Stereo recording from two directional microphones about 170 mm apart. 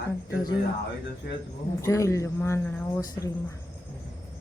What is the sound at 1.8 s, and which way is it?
A man's voice, 20° left (ahead or behind).